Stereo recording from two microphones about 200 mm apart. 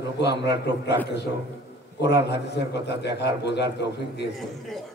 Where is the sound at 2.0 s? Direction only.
60° left (ahead or behind).